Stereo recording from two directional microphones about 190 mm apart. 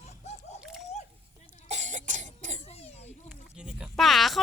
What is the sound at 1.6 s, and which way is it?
Cough, 35° right (ahead or behind).